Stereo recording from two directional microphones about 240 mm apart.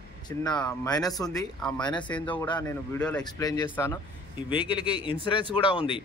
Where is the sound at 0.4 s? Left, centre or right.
Centre.